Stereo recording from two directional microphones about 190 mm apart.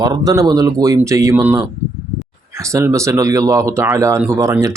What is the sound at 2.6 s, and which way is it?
Speech, 15° right (ahead or behind).